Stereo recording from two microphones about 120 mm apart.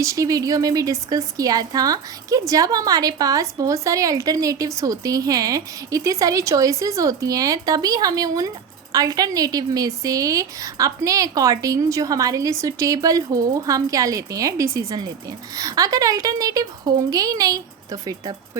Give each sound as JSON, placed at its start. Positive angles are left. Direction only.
{"t": 0.0, "sound": "speech", "side_deg": -25}